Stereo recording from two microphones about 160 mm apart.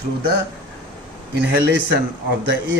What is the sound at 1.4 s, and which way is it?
Speech, 90° right.